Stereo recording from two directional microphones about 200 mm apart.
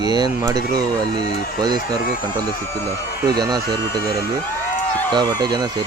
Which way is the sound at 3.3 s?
20° right (ahead or behind).